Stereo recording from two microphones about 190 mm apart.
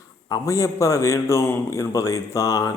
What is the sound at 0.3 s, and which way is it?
A man's voice, 15° left (ahead or behind).